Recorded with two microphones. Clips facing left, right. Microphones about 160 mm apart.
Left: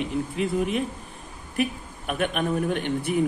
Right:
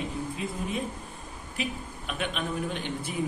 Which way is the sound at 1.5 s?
55° left (ahead or behind).